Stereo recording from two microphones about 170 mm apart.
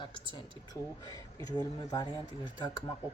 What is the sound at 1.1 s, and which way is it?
Speech, 20° left (ahead or behind).